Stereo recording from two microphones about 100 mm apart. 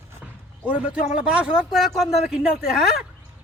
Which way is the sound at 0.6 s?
10° right (ahead or behind).